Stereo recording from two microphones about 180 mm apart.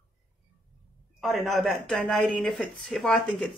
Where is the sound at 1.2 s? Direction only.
Centre (ahead or behind).